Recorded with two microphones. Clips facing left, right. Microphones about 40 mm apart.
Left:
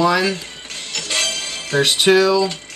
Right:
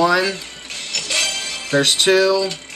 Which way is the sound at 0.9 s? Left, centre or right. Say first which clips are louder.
Even; left.